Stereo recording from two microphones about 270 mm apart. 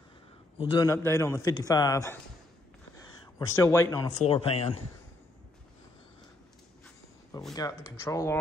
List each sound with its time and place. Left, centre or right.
0.6 s a man's voice: centre
7.5 s a man's voice: centre